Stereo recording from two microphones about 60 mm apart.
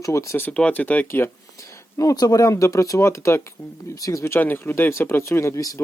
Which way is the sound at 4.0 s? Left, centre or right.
Left.